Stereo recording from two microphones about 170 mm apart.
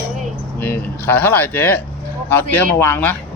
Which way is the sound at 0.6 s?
10° left (ahead or behind).